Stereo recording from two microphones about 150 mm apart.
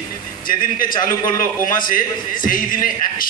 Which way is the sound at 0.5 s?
70° left (ahead or behind).